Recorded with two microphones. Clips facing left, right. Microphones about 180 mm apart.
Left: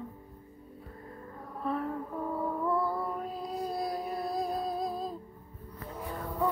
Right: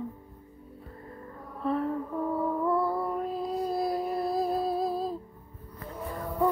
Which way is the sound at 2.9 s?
Centre (ahead or behind).